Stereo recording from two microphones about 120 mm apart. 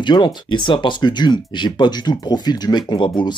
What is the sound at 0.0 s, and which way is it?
Speech, 40° left (ahead or behind).